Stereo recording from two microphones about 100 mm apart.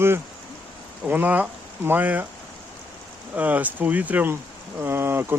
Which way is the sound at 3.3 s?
15° right (ahead or behind).